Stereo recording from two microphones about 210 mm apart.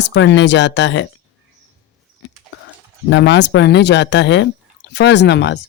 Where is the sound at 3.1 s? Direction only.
55° left (ahead or behind).